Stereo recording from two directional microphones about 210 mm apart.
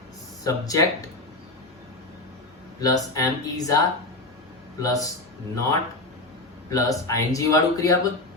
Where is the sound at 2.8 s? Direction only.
15° left (ahead or behind).